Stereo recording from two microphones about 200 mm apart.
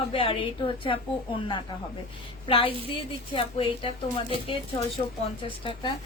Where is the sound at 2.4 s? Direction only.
25° left (ahead or behind).